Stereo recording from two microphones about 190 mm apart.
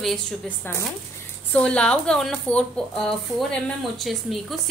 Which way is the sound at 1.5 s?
5° left (ahead or behind).